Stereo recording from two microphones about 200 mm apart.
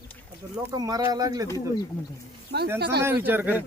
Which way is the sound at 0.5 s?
20° right (ahead or behind).